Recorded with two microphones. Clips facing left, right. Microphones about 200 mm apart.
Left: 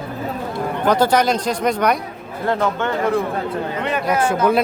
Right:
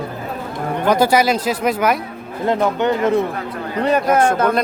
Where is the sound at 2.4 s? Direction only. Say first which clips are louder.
Right 3 dB; 15° right (ahead or behind).